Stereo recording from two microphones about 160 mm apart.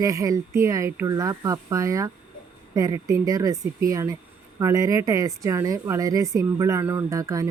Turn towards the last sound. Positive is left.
turn(degrees=-20)  # may be behind; listen again after turning